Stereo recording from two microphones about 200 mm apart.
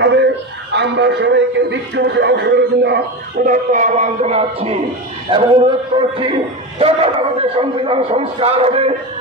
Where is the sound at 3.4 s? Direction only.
40° right (ahead or behind).